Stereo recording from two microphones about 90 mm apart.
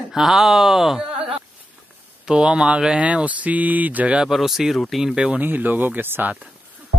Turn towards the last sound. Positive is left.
turn(degrees=-25)  # may be behind; listen again after turning